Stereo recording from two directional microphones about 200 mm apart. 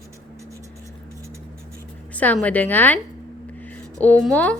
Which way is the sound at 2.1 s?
5° left (ahead or behind).